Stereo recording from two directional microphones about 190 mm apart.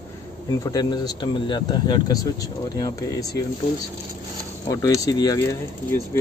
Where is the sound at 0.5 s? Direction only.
20° left (ahead or behind).